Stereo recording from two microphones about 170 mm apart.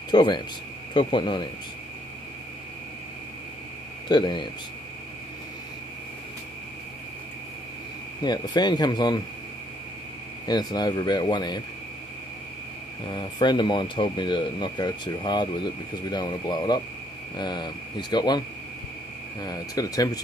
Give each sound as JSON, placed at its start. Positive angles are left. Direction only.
{"t": 0.1, "sound": "speech", "side_deg": 25}
{"t": 4.1, "sound": "speech", "side_deg": 25}
{"t": 8.2, "sound": "speech", "side_deg": 25}
{"t": 10.4, "sound": "speech", "side_deg": 25}
{"t": 13.1, "sound": "speech", "side_deg": 25}
{"t": 19.4, "sound": "speech", "side_deg": 20}